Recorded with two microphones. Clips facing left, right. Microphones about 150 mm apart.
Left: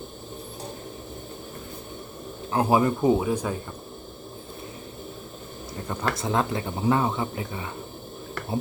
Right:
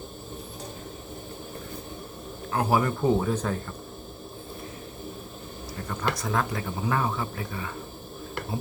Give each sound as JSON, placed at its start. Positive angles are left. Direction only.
{"t": 2.5, "sound": "speech", "side_deg": 20}
{"t": 6.1, "sound": "speech", "side_deg": 25}